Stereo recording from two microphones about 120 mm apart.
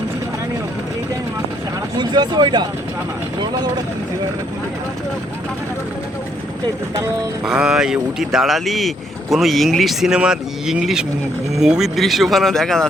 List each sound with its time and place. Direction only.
2.0 s speech: 40° right (ahead or behind)
7.4 s speech: 5° right (ahead or behind)